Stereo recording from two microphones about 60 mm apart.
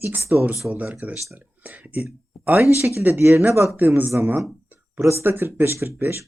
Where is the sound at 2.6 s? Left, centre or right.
Right.